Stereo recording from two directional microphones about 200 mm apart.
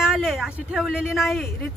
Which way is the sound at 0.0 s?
Centre (ahead or behind).